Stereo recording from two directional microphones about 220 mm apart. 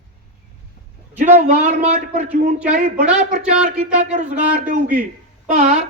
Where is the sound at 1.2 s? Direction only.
30° right (ahead or behind).